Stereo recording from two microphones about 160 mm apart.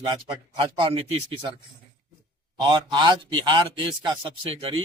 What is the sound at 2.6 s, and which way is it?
A man's voice, 30° right (ahead or behind).